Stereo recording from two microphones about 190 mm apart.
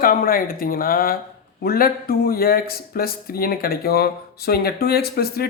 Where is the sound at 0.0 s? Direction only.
50° left (ahead or behind).